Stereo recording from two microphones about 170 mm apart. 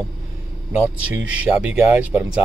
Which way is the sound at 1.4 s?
10° right (ahead or behind).